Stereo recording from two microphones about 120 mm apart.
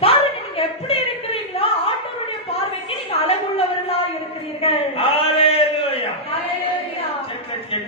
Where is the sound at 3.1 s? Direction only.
55° left (ahead or behind).